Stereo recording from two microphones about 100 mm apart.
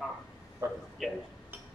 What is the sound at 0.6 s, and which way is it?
Speech, 30° right (ahead or behind).